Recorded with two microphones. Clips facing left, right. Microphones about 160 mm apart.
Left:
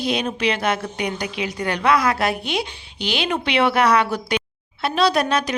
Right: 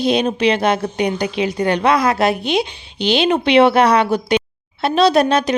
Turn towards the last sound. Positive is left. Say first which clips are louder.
# right 6 dB
turn(degrees=-25)  # may be behind; listen again after turning